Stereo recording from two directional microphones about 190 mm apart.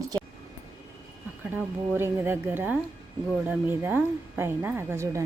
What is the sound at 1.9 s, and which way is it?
A woman's voice, 10° right (ahead or behind).